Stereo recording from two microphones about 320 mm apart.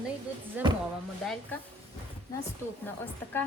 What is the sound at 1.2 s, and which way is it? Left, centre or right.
Speech, centre.